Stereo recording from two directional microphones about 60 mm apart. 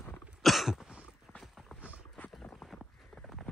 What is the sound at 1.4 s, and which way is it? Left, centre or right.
Clip-clop, centre.